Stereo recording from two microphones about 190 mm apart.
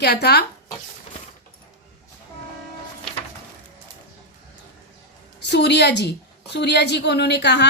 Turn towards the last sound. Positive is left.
turn(degrees=65)  # may be behind; listen again after turning